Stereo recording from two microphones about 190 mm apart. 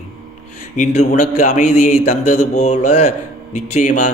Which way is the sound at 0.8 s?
40° left (ahead or behind).